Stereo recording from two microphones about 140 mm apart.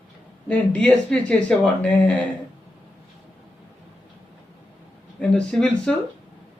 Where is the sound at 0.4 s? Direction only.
10° left (ahead or behind).